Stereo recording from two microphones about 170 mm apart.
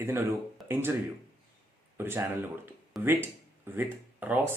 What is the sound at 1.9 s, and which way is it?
Speech, 15° right (ahead or behind).